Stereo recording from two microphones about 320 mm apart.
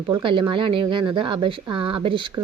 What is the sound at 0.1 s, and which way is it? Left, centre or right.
Speech, centre.